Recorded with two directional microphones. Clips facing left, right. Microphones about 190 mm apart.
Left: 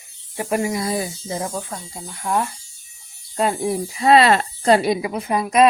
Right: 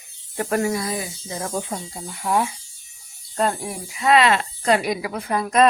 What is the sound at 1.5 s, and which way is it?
Speech, 10° right (ahead or behind).